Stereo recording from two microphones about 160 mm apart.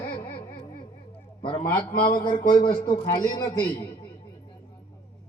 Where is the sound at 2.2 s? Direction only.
30° left (ahead or behind).